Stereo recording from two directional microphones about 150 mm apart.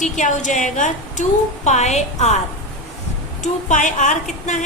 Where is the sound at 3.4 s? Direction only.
55° left (ahead or behind).